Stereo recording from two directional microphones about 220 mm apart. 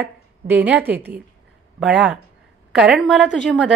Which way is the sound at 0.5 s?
10° right (ahead or behind).